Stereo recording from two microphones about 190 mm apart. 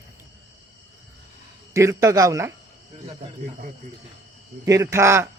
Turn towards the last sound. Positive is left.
turn(degrees=-15)  # may be behind; listen again after turning